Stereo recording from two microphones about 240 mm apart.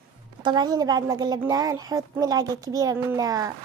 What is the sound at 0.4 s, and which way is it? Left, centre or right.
A woman's voice, centre.